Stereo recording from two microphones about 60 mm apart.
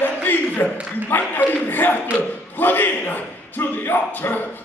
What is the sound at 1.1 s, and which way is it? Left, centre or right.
Speech, left.